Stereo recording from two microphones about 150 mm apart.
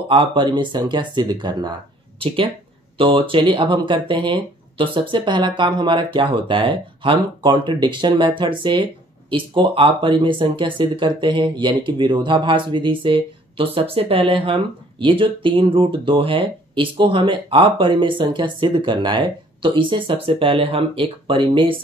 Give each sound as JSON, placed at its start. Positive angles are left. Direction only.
{"t": 0.1, "sound": "speech", "side_deg": -35}